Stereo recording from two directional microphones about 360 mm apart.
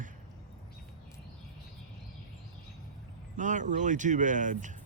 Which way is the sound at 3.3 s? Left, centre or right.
Right.